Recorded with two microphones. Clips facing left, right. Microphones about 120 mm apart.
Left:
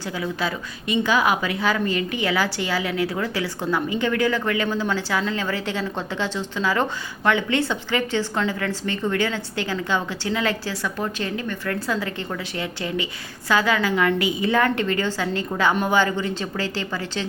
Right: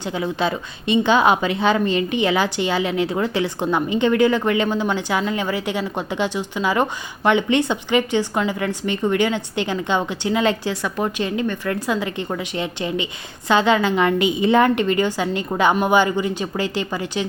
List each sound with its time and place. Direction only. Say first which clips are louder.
0.2 s a woman's voice: right 5 dB; 25° right (ahead or behind)